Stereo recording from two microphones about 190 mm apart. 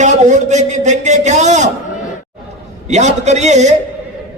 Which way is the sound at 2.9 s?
35° right (ahead or behind).